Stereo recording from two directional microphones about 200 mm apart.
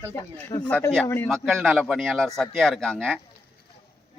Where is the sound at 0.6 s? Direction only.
5° left (ahead or behind).